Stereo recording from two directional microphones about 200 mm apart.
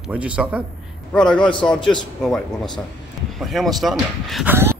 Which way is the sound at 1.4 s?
25° left (ahead or behind).